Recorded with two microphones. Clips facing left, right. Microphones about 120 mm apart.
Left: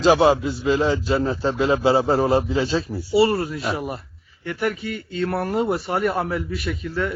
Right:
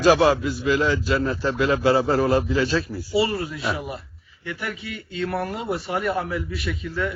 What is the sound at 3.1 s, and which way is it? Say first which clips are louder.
Speech: left 5 dB; 45° left (ahead or behind).